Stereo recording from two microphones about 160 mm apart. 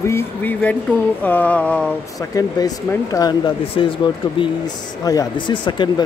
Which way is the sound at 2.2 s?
25° left (ahead or behind).